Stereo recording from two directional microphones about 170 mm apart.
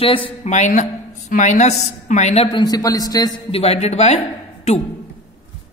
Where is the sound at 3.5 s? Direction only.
35° left (ahead or behind).